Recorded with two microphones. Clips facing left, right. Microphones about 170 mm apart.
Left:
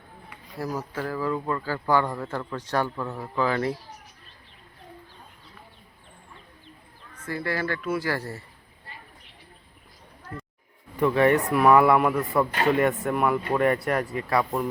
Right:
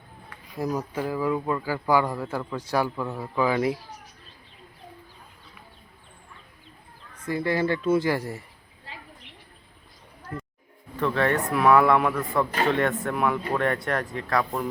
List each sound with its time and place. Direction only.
0.6 s speech: 15° right (ahead or behind)
7.3 s speech: 20° right (ahead or behind)
10.9 s speech: 15° left (ahead or behind)